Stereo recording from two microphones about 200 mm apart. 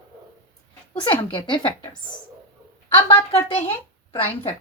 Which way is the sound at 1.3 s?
25° left (ahead or behind).